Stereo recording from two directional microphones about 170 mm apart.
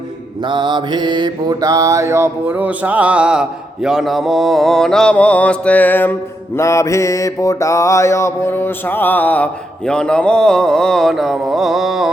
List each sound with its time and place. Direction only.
0.4 s mantra: 25° right (ahead or behind); by 12.1 s centre (ahead or behind)